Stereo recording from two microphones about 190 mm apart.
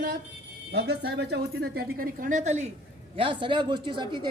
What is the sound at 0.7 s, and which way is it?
Speech, 60° right (ahead or behind).